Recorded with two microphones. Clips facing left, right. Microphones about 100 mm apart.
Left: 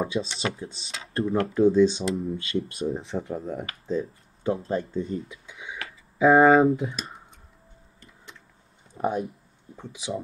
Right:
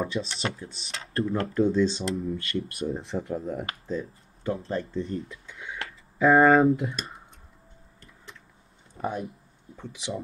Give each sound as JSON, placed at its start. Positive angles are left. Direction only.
{"t": 0.0, "sound": "speech", "side_deg": 5}
{"t": 2.3, "sound": "speech", "side_deg": 25}
{"t": 2.9, "sound": "speech", "side_deg": 0}
{"t": 3.9, "sound": "a sound", "side_deg": 15}
{"t": 4.6, "sound": "speech", "side_deg": 10}
{"t": 8.9, "sound": "a sound", "side_deg": 20}
{"t": 9.8, "sound": "speech", "side_deg": 0}